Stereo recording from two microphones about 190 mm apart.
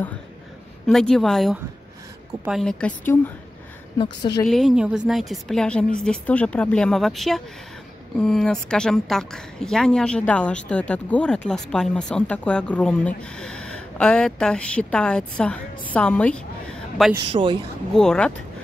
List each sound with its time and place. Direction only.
0.8 s a woman's voice: 5° left (ahead or behind)
4.5 s a woman's voice: centre (ahead or behind)
17.3 s speech: 25° right (ahead or behind)
17.9 s a woman's voice: 5° left (ahead or behind)